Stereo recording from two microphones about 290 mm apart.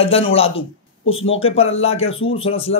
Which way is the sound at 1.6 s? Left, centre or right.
Left.